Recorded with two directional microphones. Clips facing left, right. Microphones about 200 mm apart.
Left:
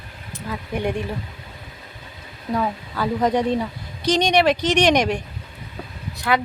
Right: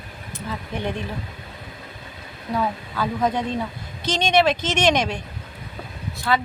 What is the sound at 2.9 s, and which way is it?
Speech, 15° left (ahead or behind).